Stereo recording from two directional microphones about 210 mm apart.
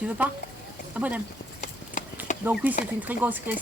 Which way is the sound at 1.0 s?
5° right (ahead or behind).